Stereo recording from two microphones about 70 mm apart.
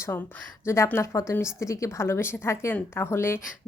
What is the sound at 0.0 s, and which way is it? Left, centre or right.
Speech, left.